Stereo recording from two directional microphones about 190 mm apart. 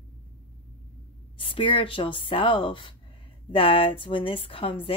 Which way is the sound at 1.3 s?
30° left (ahead or behind).